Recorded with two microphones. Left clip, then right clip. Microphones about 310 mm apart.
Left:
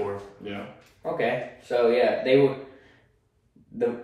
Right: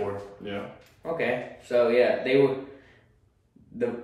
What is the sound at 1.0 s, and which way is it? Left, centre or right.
Speech, centre.